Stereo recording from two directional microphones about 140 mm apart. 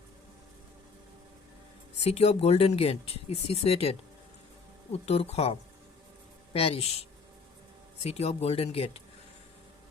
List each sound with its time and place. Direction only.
2.0 s speech: 50° left (ahead or behind)